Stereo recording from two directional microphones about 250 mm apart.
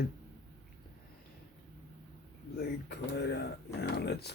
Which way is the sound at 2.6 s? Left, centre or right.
Left.